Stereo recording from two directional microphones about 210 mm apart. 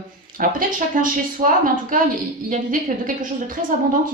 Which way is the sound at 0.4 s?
40° right (ahead or behind).